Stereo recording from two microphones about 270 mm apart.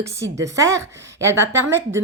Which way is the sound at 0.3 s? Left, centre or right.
Centre.